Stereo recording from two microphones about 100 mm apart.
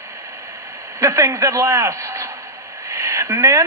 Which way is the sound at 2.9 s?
30° right (ahead or behind).